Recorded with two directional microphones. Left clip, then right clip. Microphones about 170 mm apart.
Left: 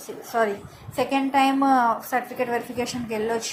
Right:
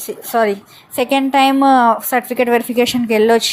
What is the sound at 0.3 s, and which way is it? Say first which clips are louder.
A woman's voice: right 8 dB; 45° right (ahead or behind).